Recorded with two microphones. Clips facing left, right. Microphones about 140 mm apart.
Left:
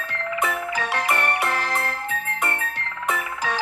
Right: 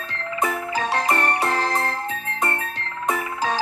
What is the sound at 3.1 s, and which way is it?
Frog, 35° right (ahead or behind).